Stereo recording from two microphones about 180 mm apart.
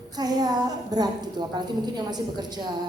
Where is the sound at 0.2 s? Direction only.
20° right (ahead or behind).